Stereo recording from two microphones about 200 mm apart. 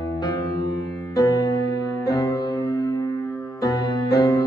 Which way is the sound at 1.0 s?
15° left (ahead or behind).